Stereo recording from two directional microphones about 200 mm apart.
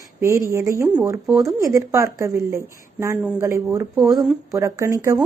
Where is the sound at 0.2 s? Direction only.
15° right (ahead or behind).